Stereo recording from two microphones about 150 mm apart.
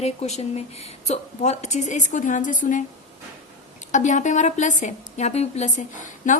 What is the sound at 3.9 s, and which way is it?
A woman's voice, 55° left (ahead or behind).